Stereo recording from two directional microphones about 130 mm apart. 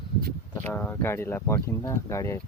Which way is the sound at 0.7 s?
15° left (ahead or behind).